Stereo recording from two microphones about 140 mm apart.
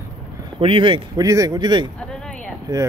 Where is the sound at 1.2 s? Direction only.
25° right (ahead or behind).